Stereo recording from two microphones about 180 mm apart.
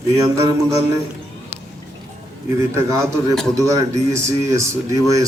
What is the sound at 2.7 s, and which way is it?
A man's voice, 20° right (ahead or behind).